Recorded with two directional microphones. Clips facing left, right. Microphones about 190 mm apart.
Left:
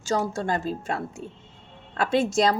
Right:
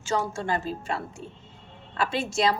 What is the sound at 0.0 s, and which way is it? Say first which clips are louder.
A woman's voice: left 2 dB; 40° left (ahead or behind).